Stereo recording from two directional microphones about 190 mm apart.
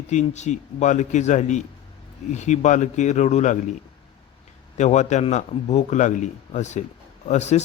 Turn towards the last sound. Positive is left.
turn(degrees=35)  # may be behind; listen again after turning